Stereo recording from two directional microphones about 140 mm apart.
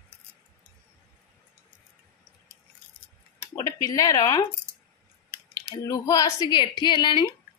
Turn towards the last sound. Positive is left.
turn(degrees=35)  # may be behind; listen again after turning